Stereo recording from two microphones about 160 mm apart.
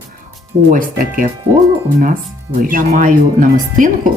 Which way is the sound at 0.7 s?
60° right (ahead or behind).